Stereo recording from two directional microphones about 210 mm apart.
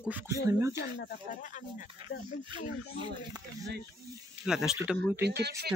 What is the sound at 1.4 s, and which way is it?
Speech, 35° left (ahead or behind).